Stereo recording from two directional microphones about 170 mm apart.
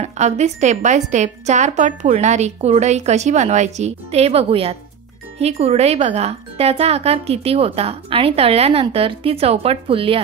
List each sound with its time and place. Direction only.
0.0 s a woman's voice: 40° right (ahead or behind)